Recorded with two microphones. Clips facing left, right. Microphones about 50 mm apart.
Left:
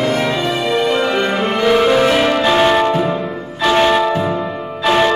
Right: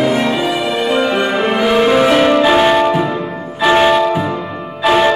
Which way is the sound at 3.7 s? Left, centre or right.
Centre.